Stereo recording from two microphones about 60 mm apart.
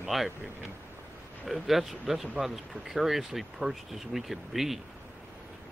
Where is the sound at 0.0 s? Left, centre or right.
Centre.